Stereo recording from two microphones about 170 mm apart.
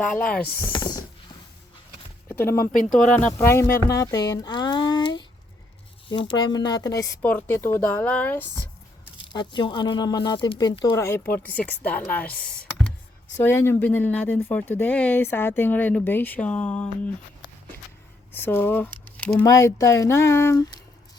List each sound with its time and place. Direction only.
0.1 s speech: 5° left (ahead or behind)
0.6 s speech: 25° left (ahead or behind)
2.4 s speech: 15° left (ahead or behind)
7.2 s speech: 10° left (ahead or behind)
9.3 s speech: 25° left (ahead or behind)
10.9 s speech: 15° left (ahead or behind)
13.4 s speech: 15° left (ahead or behind)
18.3 s speech: 10° left (ahead or behind)